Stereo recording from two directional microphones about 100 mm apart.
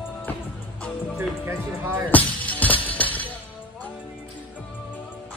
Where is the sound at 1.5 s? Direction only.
25° right (ahead or behind).